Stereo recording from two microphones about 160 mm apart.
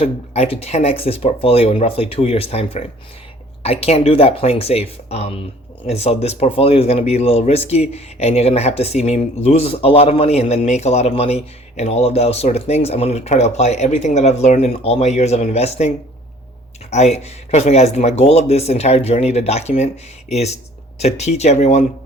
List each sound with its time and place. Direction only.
0.0 s speech: 40° left (ahead or behind)
16.9 s speech: 45° left (ahead or behind)